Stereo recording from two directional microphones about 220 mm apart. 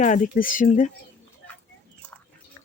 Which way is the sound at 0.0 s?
35° left (ahead or behind).